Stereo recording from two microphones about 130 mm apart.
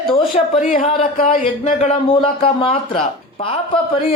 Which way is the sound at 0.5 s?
80° left.